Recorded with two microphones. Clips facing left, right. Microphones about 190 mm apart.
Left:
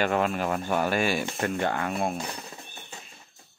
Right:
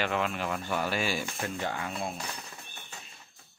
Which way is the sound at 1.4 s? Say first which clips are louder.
Left 6 dB; 65° left (ahead or behind).